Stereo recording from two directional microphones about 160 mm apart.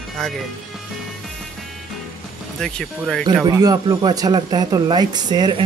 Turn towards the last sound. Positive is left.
turn(degrees=-25)  # may be behind; listen again after turning